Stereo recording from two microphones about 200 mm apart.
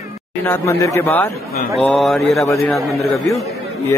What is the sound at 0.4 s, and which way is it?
Speech, 10° left (ahead or behind).